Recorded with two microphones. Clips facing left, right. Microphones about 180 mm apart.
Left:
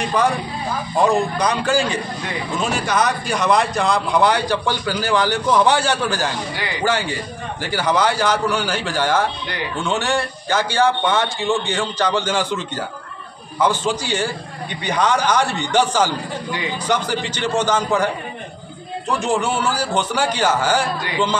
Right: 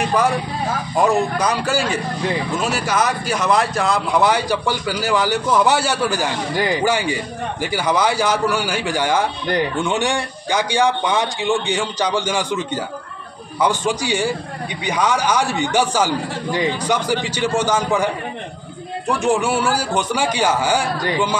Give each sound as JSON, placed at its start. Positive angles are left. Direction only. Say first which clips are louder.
{"t": 0.9, "sound": "a man's voice", "louder": "even", "side_deg": -5}
{"t": 6.5, "sound": "speech", "louder": "right 8 dB", "side_deg": -45}
{"t": 6.8, "sound": "a man's voice", "louder": "right 2 dB", "side_deg": -10}